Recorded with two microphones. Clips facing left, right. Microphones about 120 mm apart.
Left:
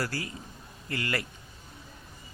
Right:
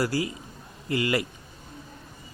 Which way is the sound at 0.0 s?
15° right (ahead or behind).